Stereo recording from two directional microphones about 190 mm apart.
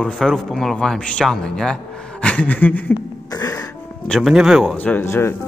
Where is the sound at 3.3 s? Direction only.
20° left (ahead or behind).